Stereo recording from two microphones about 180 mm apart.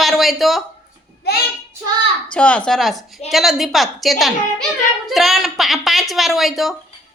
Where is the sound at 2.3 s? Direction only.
5° left (ahead or behind).